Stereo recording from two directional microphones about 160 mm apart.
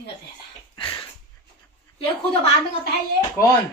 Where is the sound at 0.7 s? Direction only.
30° left (ahead or behind).